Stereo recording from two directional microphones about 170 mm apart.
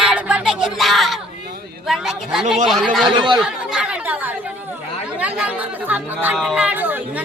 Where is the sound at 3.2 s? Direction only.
25° right (ahead or behind).